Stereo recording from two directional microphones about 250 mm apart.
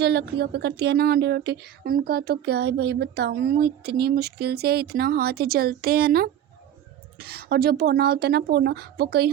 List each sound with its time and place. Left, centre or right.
0.0 s speech: right